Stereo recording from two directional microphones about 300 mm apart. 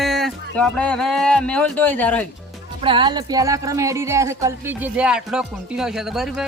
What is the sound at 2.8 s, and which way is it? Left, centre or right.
Speech, centre.